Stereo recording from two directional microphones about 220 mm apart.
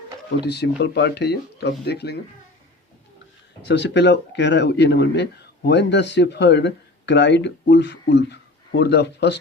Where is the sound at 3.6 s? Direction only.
50° left (ahead or behind).